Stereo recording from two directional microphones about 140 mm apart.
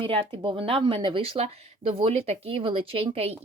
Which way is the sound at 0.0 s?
40° right (ahead or behind).